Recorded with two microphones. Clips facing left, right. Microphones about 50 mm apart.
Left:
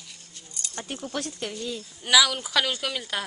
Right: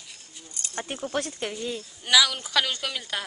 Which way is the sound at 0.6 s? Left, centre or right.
Right.